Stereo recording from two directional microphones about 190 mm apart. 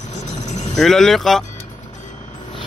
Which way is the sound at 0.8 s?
Centre (ahead or behind).